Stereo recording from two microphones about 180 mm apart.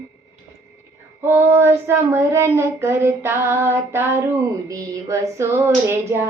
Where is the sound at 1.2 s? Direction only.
10° right (ahead or behind).